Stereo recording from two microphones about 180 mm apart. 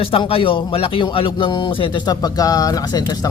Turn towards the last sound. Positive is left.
turn(degrees=20)  # may be behind; listen again after turning